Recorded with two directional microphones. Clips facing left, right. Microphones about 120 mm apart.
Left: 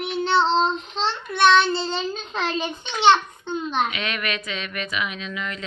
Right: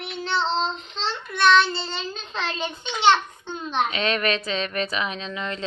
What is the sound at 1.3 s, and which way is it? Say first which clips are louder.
A child's voice: left 1 dB; 20° left (ahead or behind).